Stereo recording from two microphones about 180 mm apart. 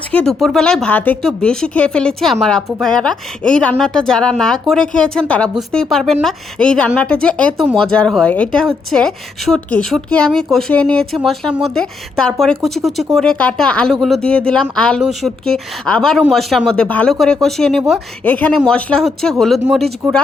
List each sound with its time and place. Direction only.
0.1 s a woman's voice: 5° left (ahead or behind)